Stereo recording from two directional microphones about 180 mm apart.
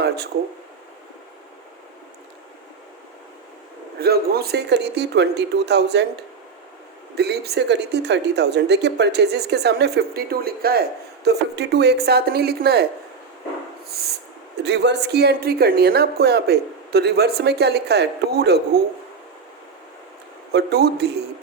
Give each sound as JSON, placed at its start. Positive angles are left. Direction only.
{"t": 4.0, "sound": "speech", "side_deg": -60}
{"t": 13.9, "sound": "speech", "side_deg": -60}
{"t": 20.5, "sound": "speech", "side_deg": -65}